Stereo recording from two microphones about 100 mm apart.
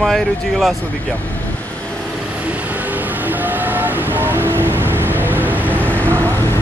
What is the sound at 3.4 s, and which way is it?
Vehicle, 20° right (ahead or behind).